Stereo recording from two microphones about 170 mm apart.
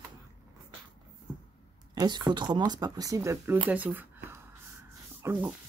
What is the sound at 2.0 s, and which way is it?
Speech, 25° right (ahead or behind).